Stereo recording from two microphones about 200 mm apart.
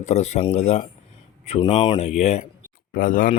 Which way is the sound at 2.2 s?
35° left (ahead or behind).